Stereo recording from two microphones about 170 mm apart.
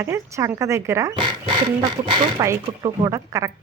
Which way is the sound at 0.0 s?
15° right (ahead or behind).